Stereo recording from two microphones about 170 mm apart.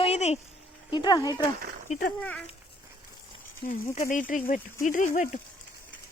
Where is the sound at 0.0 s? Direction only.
40° left (ahead or behind).